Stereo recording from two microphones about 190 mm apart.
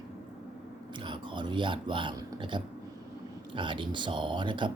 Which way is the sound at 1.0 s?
25° right (ahead or behind).